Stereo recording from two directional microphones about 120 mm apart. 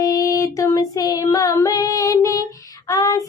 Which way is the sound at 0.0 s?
30° left (ahead or behind).